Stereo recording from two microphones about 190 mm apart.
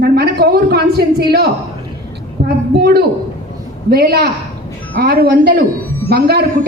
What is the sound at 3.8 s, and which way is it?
A woman's voice, 55° right (ahead or behind).